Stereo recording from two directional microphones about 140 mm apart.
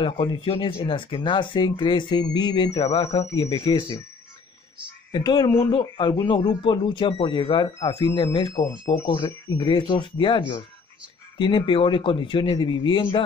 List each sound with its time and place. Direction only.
0.0 s speech: 35° left (ahead or behind)
5.1 s speech: 30° left (ahead or behind)